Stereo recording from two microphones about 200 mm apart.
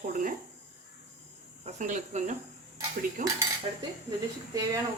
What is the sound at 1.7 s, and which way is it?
Speech, 40° right (ahead or behind).